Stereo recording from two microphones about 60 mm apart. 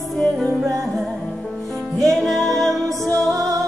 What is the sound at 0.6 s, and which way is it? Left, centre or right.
Music, right.